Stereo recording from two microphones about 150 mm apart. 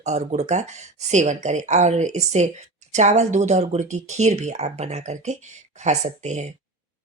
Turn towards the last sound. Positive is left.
turn(degrees=-50)  # may be behind; listen again after turning